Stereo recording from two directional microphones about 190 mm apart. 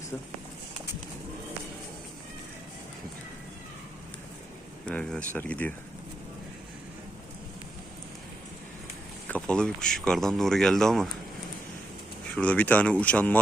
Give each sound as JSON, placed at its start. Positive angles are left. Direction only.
{"t": 4.9, "sound": "speech", "side_deg": 5}
{"t": 9.3, "sound": "speech", "side_deg": 5}
{"t": 12.4, "sound": "speech", "side_deg": 5}